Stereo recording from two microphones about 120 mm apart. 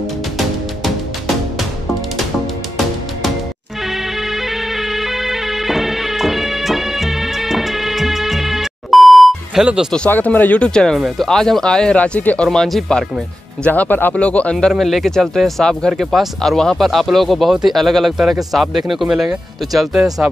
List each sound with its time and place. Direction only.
3.9 s music: centre (ahead or behind)
9.7 s speech: 5° right (ahead or behind)
9.9 s speech: 10° left (ahead or behind)
11.0 s speech: 5° right (ahead or behind); by 12.4 s 10° left (ahead or behind)
12.4 s speech: centre (ahead or behind)
13.7 s speech: 15° left (ahead or behind); by 20.2 s 5° right (ahead or behind)